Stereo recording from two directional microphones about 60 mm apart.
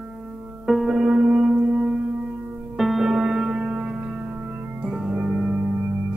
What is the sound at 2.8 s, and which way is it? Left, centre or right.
Music, centre.